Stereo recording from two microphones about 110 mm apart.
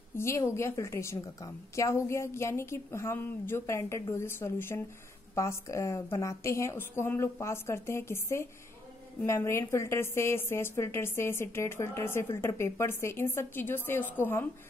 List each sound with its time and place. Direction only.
0.1 s a woman's voice: 25° left (ahead or behind)